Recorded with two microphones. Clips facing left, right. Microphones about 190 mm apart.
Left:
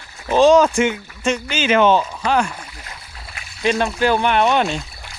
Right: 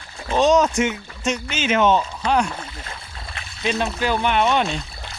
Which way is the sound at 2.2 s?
5° left (ahead or behind).